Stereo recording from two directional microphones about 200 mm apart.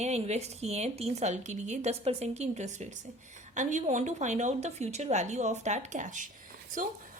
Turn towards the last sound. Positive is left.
turn(degrees=-40)  # may be behind; listen again after turning